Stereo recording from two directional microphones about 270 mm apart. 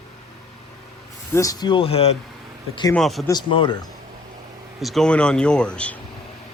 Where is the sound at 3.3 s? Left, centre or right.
Centre.